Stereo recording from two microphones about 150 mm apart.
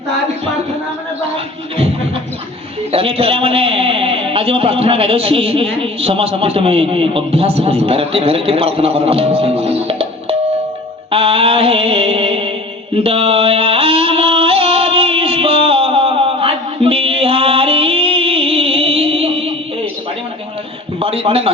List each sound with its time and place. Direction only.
2.9 s a man's voice: 40° right (ahead or behind)
11.1 s mantra: 40° right (ahead or behind)
12.9 s music: 40° right (ahead or behind)
21.0 s a man's voice: 40° right (ahead or behind)